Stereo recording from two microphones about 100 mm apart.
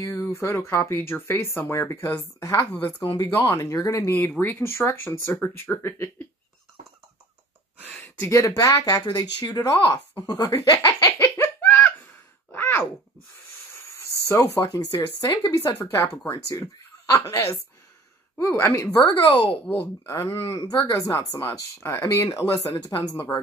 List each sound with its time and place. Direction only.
0.0 s speech: 25° left (ahead or behind)
3.4 s speech: 30° left (ahead or behind)
8.3 s speech: 30° left (ahead or behind); by 11.9 s 15° left (ahead or behind)
12.5 s a sound: 20° left (ahead or behind)
13.7 s speech: 30° left (ahead or behind)
20.4 s speech: 45° left (ahead or behind); by 23.4 s 30° left (ahead or behind)